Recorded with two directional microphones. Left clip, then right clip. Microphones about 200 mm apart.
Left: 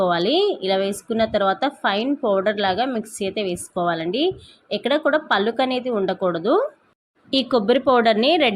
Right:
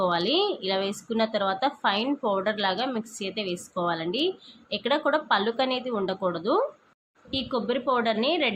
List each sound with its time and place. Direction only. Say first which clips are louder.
0.0 s a woman's voice: left 5 dB; 20° left (ahead or behind)